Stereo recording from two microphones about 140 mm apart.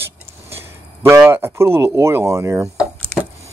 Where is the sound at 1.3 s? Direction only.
15° right (ahead or behind).